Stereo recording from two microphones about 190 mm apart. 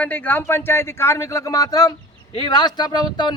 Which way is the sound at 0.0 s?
10° left (ahead or behind).